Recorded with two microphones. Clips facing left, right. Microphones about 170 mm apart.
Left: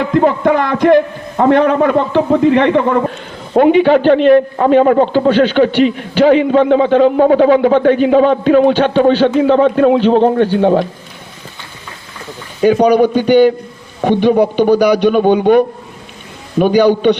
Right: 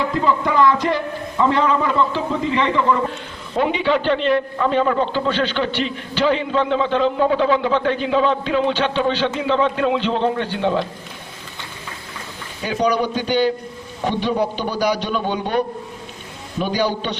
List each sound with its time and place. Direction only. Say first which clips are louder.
0.1 s a man's voice: left 8 dB; 55° left (ahead or behind)
12.6 s a man's voice: left 11 dB; 55° left (ahead or behind)